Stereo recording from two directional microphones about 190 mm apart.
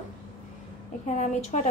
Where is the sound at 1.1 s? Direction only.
40° left (ahead or behind).